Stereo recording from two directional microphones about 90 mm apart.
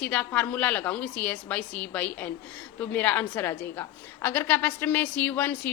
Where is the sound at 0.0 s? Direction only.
15° left (ahead or behind).